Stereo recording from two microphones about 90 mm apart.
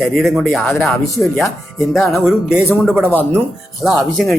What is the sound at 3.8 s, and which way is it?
Speech, centre (ahead or behind).